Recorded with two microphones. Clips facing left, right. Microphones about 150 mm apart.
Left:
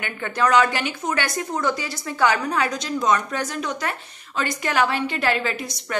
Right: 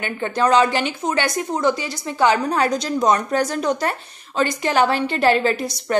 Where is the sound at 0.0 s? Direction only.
30° right (ahead or behind).